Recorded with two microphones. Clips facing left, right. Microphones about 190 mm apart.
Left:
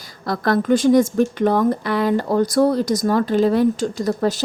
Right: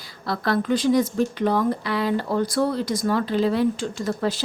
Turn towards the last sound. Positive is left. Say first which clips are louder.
# left 5 dB
turn(degrees=40)  # may be behind; listen again after turning